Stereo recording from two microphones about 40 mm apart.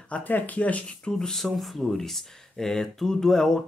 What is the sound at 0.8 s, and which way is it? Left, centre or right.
Speech, left.